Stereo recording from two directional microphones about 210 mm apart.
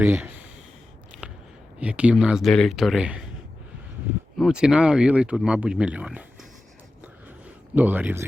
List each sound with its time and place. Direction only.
0.0 s speech: 10° right (ahead or behind)
1.1 s a sound: 5° right (ahead or behind)
1.8 s speech: 5° right (ahead or behind)
4.4 s speech: centre (ahead or behind)
7.8 s speech: 10° right (ahead or behind)